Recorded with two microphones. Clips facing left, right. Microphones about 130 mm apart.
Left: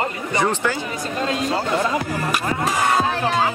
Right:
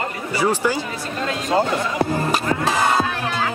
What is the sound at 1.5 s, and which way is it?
Speech, 25° right (ahead or behind).